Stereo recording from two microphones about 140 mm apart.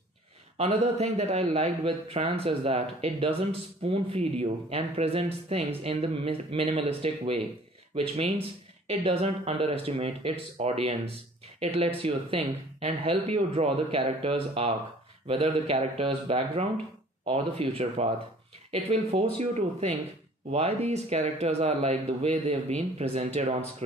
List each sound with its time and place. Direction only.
0.6 s speech: 50° right (ahead or behind)